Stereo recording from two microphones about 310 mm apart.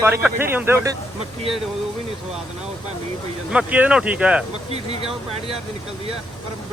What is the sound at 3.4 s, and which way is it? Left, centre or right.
Speech, centre.